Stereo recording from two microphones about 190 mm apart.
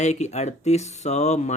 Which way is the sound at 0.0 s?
35° left (ahead or behind).